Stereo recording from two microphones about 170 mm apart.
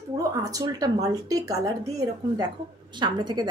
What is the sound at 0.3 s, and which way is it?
A woman's voice, 20° right (ahead or behind).